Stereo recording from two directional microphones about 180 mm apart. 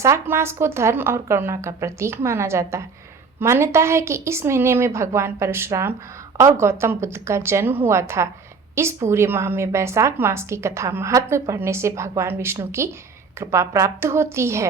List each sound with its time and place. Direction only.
0.0 s a woman's voice: 15° right (ahead or behind)